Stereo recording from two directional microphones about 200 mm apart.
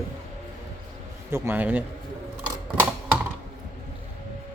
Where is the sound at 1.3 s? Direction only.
10° right (ahead or behind).